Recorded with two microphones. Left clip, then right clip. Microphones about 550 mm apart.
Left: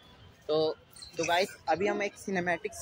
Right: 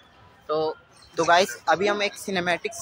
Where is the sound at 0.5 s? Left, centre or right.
Left.